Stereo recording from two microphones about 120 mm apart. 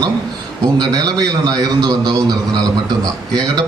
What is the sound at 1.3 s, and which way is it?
A man's voice, 35° right (ahead or behind).